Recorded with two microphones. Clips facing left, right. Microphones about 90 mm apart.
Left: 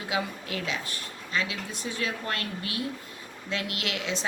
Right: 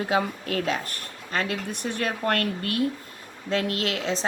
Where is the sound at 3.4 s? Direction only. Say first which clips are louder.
Right 7 dB; 40° right (ahead or behind).